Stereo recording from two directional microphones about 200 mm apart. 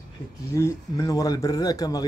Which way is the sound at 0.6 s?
15° left (ahead or behind).